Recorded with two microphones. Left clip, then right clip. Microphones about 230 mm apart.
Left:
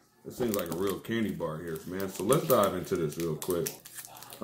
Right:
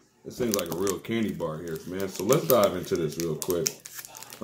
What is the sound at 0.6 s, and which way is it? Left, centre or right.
Speech, centre.